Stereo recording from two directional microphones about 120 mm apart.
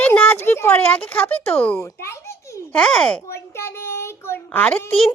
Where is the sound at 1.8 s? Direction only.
20° left (ahead or behind).